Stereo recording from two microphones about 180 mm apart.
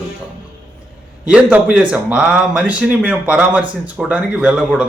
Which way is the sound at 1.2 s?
5° right (ahead or behind).